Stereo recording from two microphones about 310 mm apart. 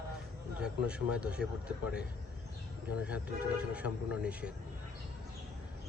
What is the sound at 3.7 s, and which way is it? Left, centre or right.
Speech, centre.